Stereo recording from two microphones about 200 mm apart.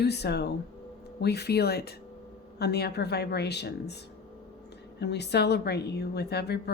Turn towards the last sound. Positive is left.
turn(degrees=55)  # may be behind; listen again after turning